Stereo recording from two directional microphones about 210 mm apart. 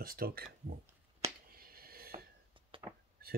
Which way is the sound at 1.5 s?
45° right (ahead or behind).